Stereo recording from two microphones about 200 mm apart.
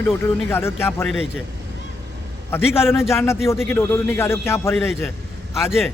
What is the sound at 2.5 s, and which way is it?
Speech, 10° left (ahead or behind).